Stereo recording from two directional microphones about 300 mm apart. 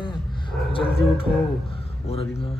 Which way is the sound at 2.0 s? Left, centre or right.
Centre.